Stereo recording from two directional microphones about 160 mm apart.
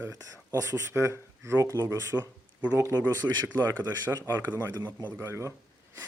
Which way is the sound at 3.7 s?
20° right (ahead or behind).